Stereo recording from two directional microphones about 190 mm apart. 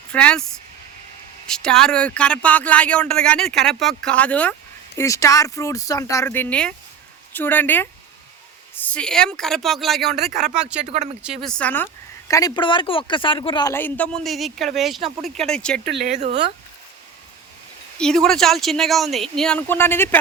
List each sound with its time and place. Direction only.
0.1 s speech: 5° left (ahead or behind)
1.5 s speech: 5° left (ahead or behind)
10.8 s speech: 35° right (ahead or behind)
11.4 s speech: 5° left (ahead or behind)
12.3 s speech: 20° left (ahead or behind)
13.7 s speech: 10° left (ahead or behind)
16.1 s speech: 30° right (ahead or behind)
17.9 s speech: 5° left (ahead or behind)